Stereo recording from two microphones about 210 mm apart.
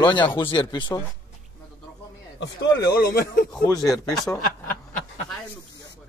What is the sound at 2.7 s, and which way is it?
Speech, 50° left (ahead or behind).